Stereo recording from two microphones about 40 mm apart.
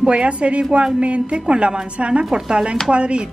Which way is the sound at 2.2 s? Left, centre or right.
Centre.